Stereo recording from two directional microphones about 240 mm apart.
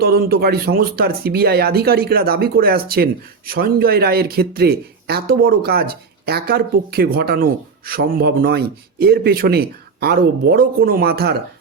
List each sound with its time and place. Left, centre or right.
0.0 s speech: right